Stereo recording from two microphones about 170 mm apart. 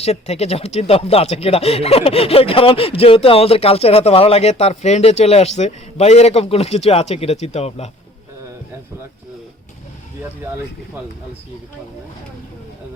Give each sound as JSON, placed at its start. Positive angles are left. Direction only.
{"t": 0.0, "sound": "speech", "side_deg": 40}